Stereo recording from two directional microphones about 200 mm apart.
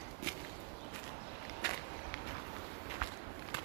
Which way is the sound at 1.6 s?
50° left (ahead or behind).